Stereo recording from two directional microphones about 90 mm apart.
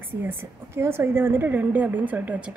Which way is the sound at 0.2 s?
25° right (ahead or behind).